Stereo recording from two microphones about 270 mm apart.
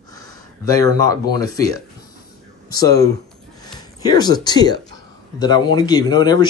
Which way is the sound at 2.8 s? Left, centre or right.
Centre.